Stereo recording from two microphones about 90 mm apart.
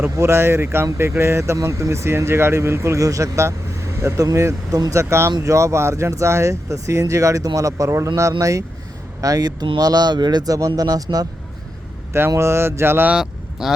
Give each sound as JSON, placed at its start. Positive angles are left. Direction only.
{"t": 0.0, "sound": "speech", "side_deg": -30}
{"t": 12.4, "sound": "speech", "side_deg": -30}
{"t": 13.1, "sound": "speech", "side_deg": -5}